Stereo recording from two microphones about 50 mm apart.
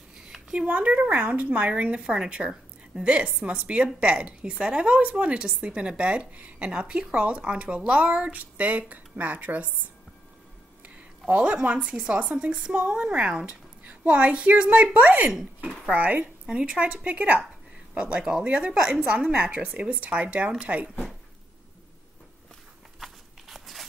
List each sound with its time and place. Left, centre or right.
0.5 s a woman's voice: right
2.0 s speech: centre
2.2 s a woman's voice: right
11.2 s a woman's voice: right
11.8 s a woman's voice: centre
16.4 s a woman's voice: centre
22.9 s walk: centre